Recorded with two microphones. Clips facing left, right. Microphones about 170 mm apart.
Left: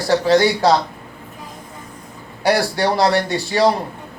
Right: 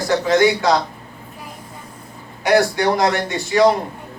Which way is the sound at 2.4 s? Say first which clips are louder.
Right 2 dB; 35° left (ahead or behind).